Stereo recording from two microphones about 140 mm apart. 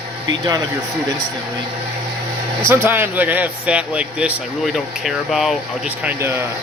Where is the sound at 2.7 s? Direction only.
15° right (ahead or behind).